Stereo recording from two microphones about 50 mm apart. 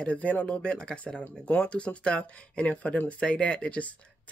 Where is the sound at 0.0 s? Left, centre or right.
Left.